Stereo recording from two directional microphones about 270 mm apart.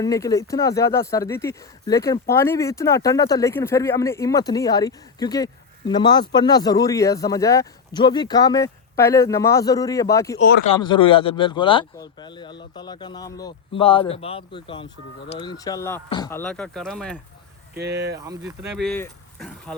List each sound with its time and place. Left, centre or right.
0.0 s speech: centre
17.7 s speech: right
18.2 s speech: centre
18.9 s speech: centre